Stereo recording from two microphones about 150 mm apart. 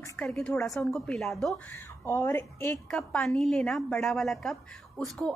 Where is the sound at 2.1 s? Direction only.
15° left (ahead or behind).